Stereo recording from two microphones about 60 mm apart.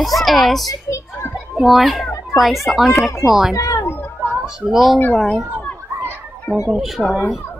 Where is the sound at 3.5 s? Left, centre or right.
Left.